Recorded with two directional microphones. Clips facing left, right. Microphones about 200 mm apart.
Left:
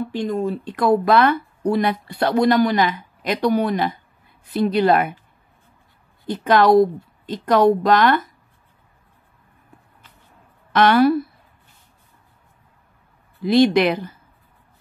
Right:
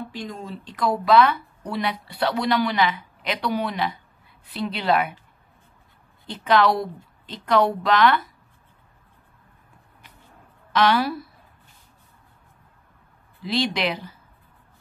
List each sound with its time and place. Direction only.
0.1 s speech: 60° left (ahead or behind)
6.2 s speech: 45° left (ahead or behind)
10.7 s speech: 55° left (ahead or behind)
13.4 s speech: 50° left (ahead or behind)